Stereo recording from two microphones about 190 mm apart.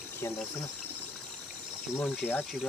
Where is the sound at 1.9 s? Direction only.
10° left (ahead or behind).